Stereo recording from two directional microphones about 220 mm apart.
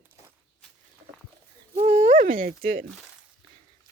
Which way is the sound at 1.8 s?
30° right (ahead or behind).